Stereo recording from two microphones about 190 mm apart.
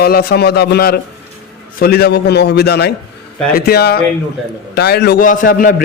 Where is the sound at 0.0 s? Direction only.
55° left (ahead or behind).